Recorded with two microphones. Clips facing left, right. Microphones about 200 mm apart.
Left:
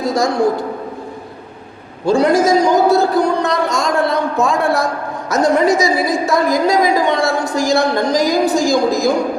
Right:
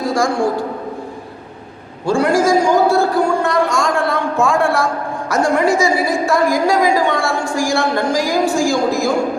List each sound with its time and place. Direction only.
2.0 s a man's voice: 20° left (ahead or behind)